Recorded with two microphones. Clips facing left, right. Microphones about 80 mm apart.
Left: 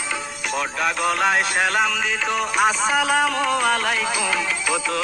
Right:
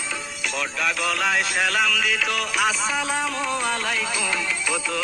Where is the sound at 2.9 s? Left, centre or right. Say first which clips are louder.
Left 6 dB; left.